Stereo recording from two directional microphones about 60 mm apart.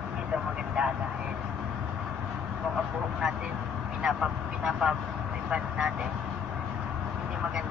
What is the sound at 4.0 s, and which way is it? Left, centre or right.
Speech, centre.